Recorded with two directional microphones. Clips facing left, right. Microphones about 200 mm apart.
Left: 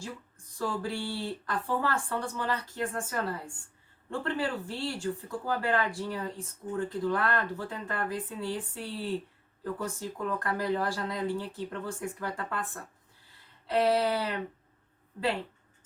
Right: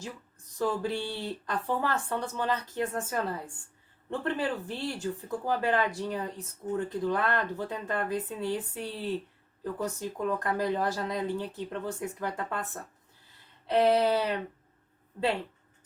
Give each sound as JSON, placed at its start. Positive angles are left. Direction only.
{"t": 0.6, "sound": "speech", "side_deg": -20}